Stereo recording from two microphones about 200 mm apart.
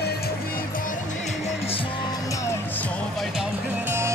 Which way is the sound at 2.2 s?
15° left (ahead or behind).